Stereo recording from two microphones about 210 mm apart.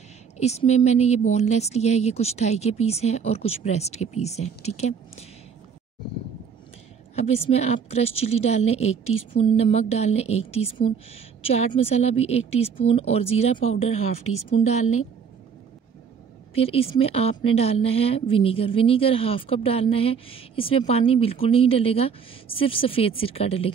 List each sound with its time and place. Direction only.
0.4 s speech: 30° left (ahead or behind)
7.2 s a woman's voice: 30° left (ahead or behind)
14.5 s speech: 30° left (ahead or behind)
16.5 s a woman's voice: 25° left (ahead or behind)